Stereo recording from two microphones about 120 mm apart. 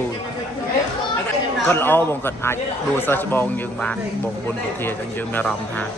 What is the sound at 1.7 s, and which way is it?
A man's voice, 15° left (ahead or behind).